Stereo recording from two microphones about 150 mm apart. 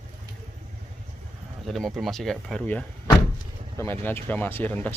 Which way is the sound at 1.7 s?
Centre (ahead or behind).